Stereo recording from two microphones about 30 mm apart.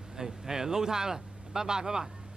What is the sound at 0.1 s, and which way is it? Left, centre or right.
Speech, centre.